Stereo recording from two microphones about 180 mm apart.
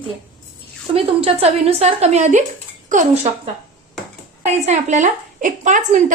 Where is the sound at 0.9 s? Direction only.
35° right (ahead or behind).